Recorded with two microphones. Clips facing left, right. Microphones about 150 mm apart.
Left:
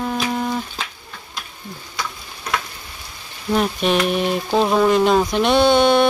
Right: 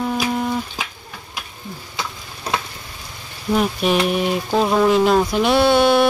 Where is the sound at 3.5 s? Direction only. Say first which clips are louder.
Even; 5° right (ahead or behind).